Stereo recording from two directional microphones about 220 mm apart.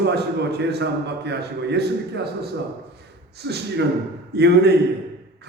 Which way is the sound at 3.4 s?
50° right (ahead or behind).